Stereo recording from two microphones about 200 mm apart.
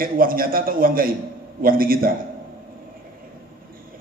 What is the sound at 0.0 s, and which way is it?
A man's voice, 45° right (ahead or behind).